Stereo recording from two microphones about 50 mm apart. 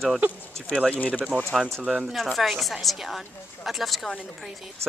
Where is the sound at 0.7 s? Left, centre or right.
Left.